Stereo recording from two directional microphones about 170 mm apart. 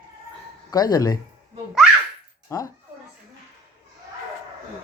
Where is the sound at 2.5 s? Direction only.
15° left (ahead or behind).